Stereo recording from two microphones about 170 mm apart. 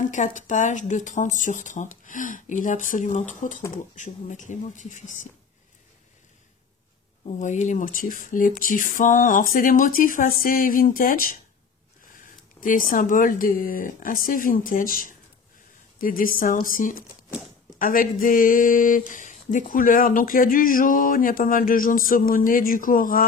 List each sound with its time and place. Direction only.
0.0 s speech: 50° left (ahead or behind)
7.2 s speech: 45° left (ahead or behind)